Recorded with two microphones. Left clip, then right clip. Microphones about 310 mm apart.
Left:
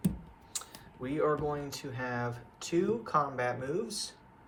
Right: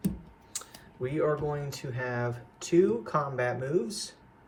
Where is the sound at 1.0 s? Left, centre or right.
Centre.